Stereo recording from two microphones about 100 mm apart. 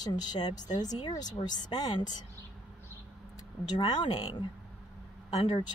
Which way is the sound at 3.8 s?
55° left (ahead or behind).